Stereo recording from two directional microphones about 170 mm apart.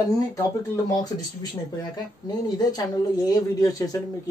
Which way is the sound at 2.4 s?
25° left (ahead or behind).